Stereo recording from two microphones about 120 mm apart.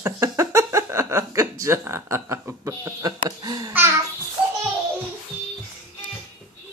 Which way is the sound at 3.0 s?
35° right (ahead or behind).